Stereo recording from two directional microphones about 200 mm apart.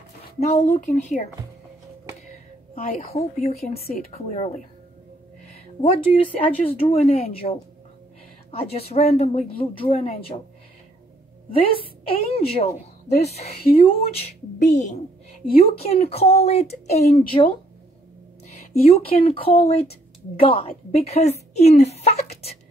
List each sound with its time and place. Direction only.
0.5 s a woman's voice: 35° left (ahead or behind)
2.7 s a woman's voice: 45° left (ahead or behind)
3.2 s a woman's voice: 30° left (ahead or behind)
3.8 s a woman's voice: 50° left (ahead or behind)
5.8 s speech: 30° left (ahead or behind)
11.5 s a woman's voice: 25° left (ahead or behind)
18.5 s speech: 30° left (ahead or behind)